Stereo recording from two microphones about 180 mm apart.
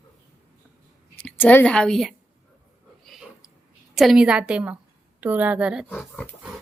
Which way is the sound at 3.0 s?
Centre (ahead or behind).